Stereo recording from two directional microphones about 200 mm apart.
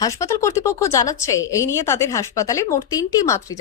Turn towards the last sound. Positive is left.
turn(degrees=15)  # may be behind; listen again after turning